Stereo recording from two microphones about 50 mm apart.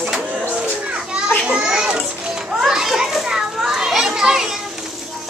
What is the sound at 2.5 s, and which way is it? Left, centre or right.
Children playing, centre.